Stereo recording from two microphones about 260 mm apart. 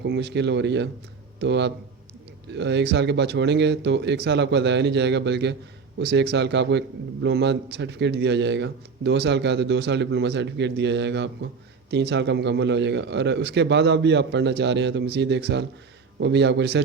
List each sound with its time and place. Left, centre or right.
0.0 s a man's voice: right